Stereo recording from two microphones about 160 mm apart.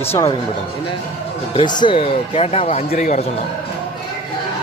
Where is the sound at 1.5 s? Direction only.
30° left (ahead or behind); by 3.2 s 45° left (ahead or behind).